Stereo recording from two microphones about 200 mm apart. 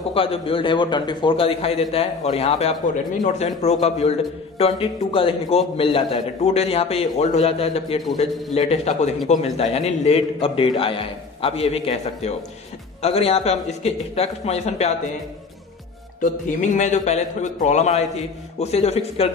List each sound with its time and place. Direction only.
0.1 s a man's voice: 25° left (ahead or behind)
16.2 s a man's voice: 40° left (ahead or behind)